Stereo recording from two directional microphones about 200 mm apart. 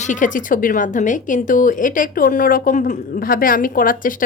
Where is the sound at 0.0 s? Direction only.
40° left (ahead or behind).